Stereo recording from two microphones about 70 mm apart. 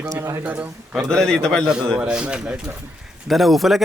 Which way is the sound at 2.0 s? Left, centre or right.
Centre.